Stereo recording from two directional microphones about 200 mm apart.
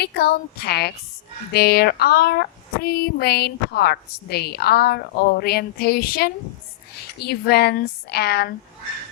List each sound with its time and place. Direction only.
0.0 s speech: 55° left (ahead or behind)